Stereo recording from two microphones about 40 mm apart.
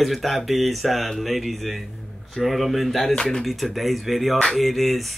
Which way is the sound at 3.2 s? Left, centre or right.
Centre.